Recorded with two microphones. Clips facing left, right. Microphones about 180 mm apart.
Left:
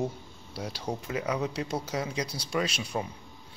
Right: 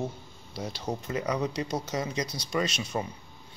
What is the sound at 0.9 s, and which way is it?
Speech, 5° left (ahead or behind).